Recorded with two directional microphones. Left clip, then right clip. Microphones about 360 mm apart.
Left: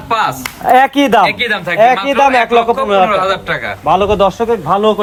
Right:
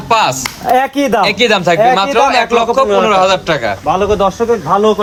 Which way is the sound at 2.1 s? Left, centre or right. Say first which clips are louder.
Left 1 dB; centre.